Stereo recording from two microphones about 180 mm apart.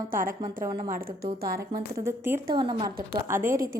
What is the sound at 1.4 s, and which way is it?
Speech, 55° right (ahead or behind).